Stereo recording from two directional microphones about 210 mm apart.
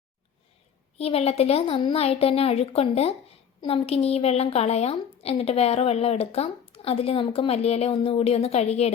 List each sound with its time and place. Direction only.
0.9 s a woman's voice: 30° left (ahead or behind)